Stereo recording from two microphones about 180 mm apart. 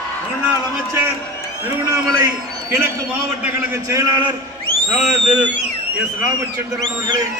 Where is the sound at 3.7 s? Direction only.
15° right (ahead or behind).